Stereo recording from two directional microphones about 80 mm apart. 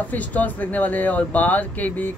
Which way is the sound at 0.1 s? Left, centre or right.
Centre.